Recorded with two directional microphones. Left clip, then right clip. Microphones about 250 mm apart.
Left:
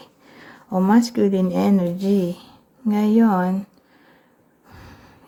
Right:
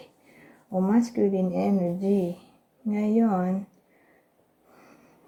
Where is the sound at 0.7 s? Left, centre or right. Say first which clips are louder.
Left 7 dB; centre.